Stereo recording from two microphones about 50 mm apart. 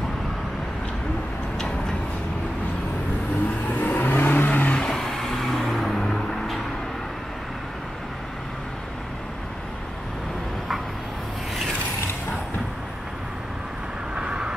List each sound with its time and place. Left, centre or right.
3.7 s vehicle: left
4.7 s vehicle: centre
14.1 s vehicle: centre